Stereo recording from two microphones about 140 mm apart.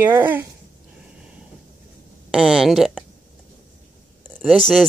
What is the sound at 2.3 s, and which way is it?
Speech, 5° right (ahead or behind).